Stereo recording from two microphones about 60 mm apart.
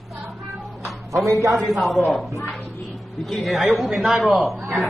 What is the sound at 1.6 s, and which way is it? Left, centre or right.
Speech, centre.